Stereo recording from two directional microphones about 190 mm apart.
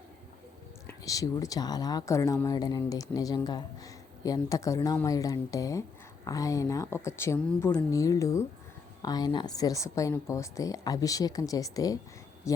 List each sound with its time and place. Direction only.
0.9 s speech: 20° left (ahead or behind)